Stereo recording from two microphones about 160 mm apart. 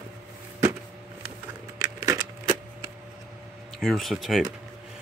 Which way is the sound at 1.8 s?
20° right (ahead or behind).